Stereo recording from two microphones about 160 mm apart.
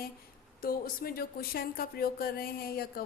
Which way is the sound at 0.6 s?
65° left (ahead or behind).